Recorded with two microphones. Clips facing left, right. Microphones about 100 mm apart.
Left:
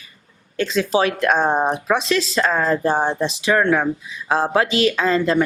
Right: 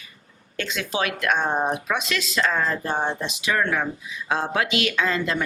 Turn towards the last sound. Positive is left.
turn(degrees=35)  # may be behind; listen again after turning